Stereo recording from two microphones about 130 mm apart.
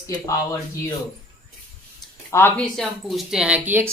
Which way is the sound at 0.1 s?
25° left (ahead or behind).